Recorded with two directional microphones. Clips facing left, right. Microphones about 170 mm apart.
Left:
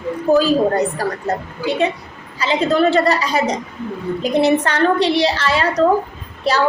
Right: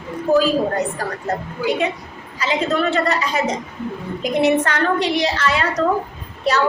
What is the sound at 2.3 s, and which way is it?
A woman's voice, 30° left (ahead or behind).